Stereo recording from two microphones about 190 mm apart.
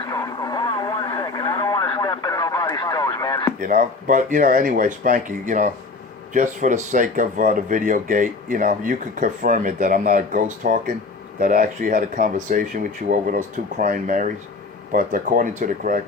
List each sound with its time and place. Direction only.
0.0 s radio: 20° left (ahead or behind)
3.7 s speech: 45° right (ahead or behind)